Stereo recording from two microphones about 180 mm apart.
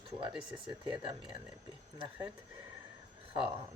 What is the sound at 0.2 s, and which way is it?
Speech, 25° right (ahead or behind).